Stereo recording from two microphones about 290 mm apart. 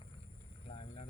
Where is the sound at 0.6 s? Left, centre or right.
Centre.